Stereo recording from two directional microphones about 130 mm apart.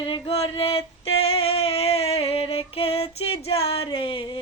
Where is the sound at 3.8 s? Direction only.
40° left (ahead or behind).